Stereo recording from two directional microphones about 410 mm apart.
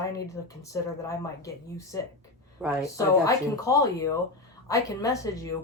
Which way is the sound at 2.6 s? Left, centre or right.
Centre.